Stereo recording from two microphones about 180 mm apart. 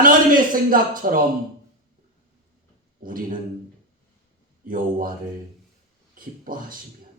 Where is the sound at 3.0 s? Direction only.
50° right (ahead or behind).